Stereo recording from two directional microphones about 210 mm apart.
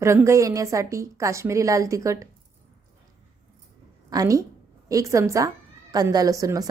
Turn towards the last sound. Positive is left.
turn(degrees=-15)  # may be behind; listen again after turning